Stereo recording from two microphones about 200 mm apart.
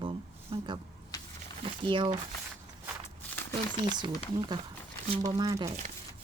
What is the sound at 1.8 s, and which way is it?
Speech, 25° right (ahead or behind).